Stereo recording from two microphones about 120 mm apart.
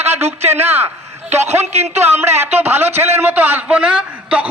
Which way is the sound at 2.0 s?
20° right (ahead or behind).